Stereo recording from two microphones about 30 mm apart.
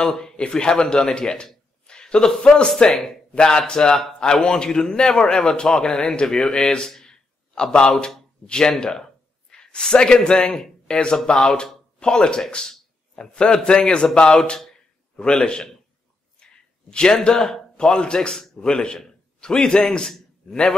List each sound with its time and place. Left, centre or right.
0.2 s a man's voice: left
3.9 s a man's voice: centre
6.0 s a man's voice: left
6.9 s a sound: left
8.6 s a man's voice: left
11.2 s a man's voice: left
16.9 s a man's voice: left
18.3 s a man's voice: centre
18.6 s a man's voice: left
19.0 s a sound: left